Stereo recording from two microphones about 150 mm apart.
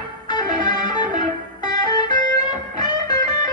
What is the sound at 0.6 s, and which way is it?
Music, 30° left (ahead or behind).